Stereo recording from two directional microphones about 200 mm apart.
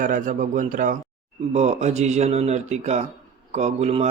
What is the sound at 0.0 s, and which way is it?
Speech, 40° right (ahead or behind).